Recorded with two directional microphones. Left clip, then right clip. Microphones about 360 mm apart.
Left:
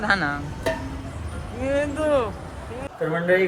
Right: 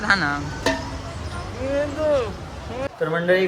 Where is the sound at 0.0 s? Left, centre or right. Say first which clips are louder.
Right 2 dB; centre.